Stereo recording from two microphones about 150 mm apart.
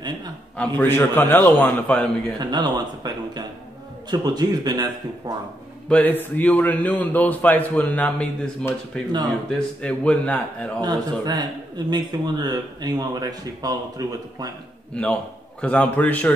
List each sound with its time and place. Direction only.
0.6 s a man's voice: 10° left (ahead or behind)
2.3 s speech: 30° right (ahead or behind)
5.9 s a man's voice: 10° left (ahead or behind)
10.8 s speech: 25° right (ahead or behind)
14.9 s a man's voice: 5° left (ahead or behind)